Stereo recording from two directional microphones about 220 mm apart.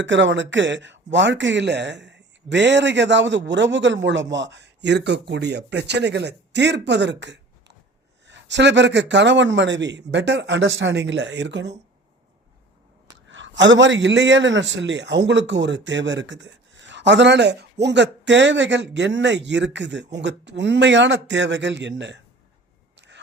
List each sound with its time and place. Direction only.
0.0 s speech: 55° right (ahead or behind)
13.1 s a man's voice: 55° right (ahead or behind)
23.0 s biting: 55° right (ahead or behind)